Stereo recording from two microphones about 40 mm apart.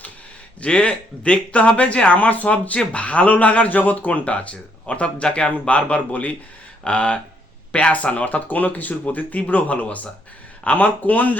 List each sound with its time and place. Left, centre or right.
0.6 s speech: left
4.9 s speech: left